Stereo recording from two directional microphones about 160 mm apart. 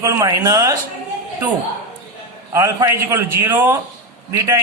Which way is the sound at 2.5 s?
20° right (ahead or behind).